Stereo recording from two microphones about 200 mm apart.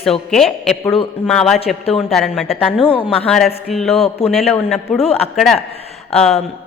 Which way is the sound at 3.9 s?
30° left (ahead or behind).